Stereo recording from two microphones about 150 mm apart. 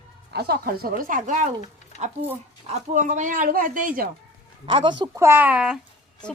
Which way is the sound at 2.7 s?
55° right (ahead or behind).